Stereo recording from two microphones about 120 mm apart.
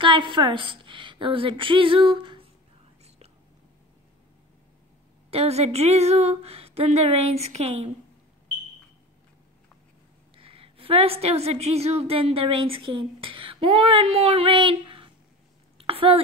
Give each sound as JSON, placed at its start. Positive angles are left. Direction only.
{"t": 0.0, "sound": "a woman's voice", "side_deg": -45}
{"t": 5.3, "sound": "speech", "side_deg": -60}
{"t": 10.3, "sound": "a woman's voice", "side_deg": -50}
{"t": 15.8, "sound": "a sound", "side_deg": -55}